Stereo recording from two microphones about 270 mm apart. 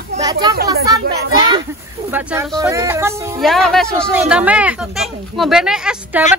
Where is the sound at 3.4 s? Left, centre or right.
Centre.